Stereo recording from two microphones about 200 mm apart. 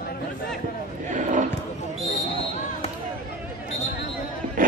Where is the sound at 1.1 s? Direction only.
40° right (ahead or behind).